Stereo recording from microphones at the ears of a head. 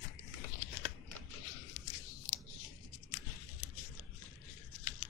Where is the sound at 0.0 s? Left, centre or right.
Left.